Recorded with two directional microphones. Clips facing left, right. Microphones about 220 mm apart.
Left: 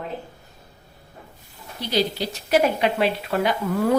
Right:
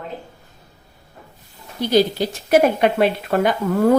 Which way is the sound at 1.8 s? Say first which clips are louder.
Right 7 dB; 45° right (ahead or behind).